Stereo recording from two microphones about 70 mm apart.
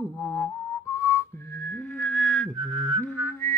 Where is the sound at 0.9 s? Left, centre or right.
Left.